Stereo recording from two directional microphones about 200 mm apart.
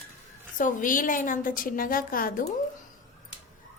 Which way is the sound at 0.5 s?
40° left (ahead or behind).